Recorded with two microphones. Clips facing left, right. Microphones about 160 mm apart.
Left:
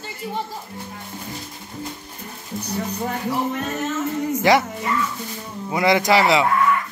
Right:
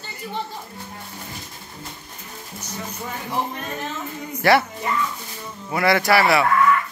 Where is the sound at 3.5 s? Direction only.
85° left.